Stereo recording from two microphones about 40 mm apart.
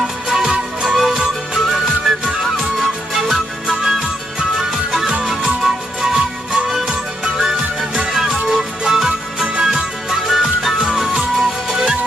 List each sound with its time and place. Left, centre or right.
0.0 s music: centre
3.6 s music: centre
4.6 s music: centre
10.0 s music: centre
10.8 s music: centre